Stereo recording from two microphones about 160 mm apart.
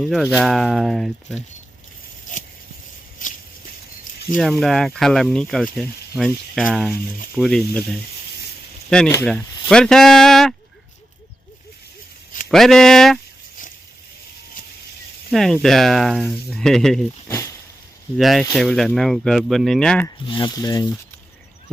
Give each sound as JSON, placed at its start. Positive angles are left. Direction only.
{"t": 0.0, "sound": "speech", "side_deg": 0}
{"t": 2.3, "sound": "a sound", "side_deg": 55}
{"t": 4.4, "sound": "speech", "side_deg": 0}
{"t": 8.9, "sound": "speech", "side_deg": 5}
{"t": 12.5, "sound": "speech", "side_deg": 0}
{"t": 15.3, "sound": "speech", "side_deg": 0}
{"t": 17.2, "sound": "a sound", "side_deg": 20}
{"t": 18.2, "sound": "speech", "side_deg": 0}
{"t": 20.2, "sound": "speech", "side_deg": 30}